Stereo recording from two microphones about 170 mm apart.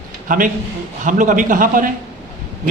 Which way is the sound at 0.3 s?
55° right (ahead or behind).